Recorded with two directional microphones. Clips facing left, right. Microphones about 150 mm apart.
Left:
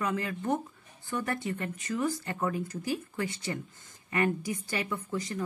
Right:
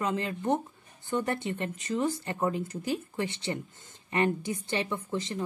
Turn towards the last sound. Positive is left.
turn(degrees=-25)  # may be behind; listen again after turning